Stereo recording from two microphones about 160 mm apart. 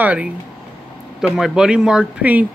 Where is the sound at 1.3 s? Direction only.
5° right (ahead or behind).